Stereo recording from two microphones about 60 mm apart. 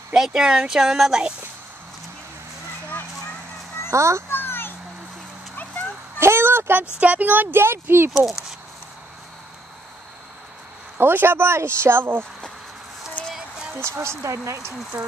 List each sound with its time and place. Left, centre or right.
0.1 s speech: centre
3.9 s a child's voice: right
4.3 s children playing: left
6.1 s a sound: right
7.0 s speech: right
8.3 s speech: centre
11.0 s speech: right
13.7 s speech: right
14.7 s speech: centre